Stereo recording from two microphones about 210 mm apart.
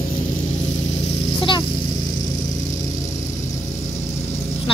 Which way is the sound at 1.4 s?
20° left (ahead or behind).